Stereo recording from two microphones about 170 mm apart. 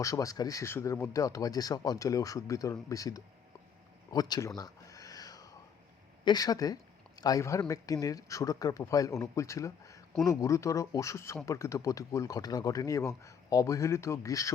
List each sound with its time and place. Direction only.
0.0 s speech: 20° left (ahead or behind)
4.1 s a sound: 20° left (ahead or behind)
6.2 s speech: 20° left (ahead or behind)